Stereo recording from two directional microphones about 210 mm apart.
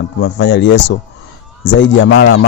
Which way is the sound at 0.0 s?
60° left (ahead or behind).